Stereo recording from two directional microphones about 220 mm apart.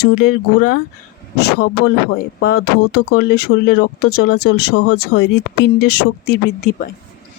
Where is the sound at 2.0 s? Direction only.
45° left (ahead or behind).